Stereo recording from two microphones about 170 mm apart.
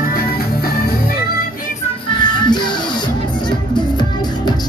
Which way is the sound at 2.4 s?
25° left (ahead or behind).